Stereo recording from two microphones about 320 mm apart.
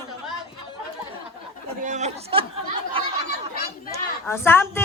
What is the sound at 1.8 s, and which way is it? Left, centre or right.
Speech, right.